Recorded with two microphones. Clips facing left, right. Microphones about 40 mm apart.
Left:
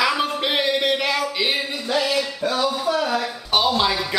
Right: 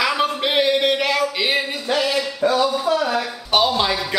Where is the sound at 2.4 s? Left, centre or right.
Right.